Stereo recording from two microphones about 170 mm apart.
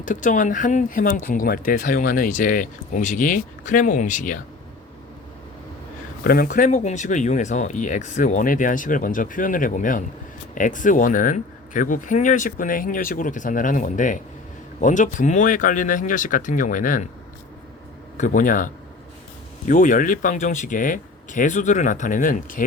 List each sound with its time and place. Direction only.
0.0 s speech: 50° left (ahead or behind)
6.2 s speech: 60° left (ahead or behind)
18.2 s speech: 50° left (ahead or behind)